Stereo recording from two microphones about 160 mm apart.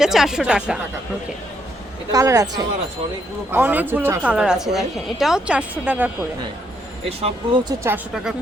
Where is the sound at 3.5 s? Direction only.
10° right (ahead or behind).